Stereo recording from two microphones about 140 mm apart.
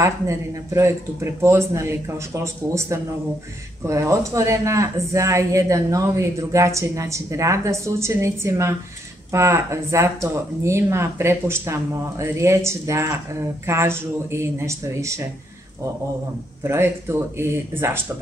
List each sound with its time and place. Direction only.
0.0 s speech: 20° right (ahead or behind)
16.6 s speech: 15° right (ahead or behind)